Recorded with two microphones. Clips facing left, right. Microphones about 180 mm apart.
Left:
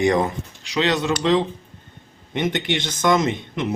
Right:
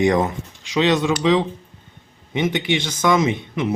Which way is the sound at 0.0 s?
20° right (ahead or behind).